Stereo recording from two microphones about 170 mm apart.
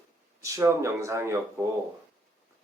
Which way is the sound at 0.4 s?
15° right (ahead or behind).